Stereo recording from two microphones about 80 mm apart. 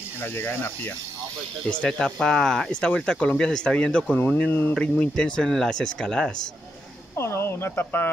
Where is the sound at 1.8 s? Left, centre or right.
Centre.